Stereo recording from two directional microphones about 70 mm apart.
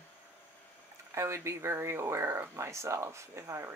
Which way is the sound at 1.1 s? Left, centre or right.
Right.